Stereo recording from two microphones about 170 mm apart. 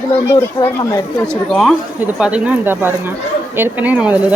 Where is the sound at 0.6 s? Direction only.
25° left (ahead or behind).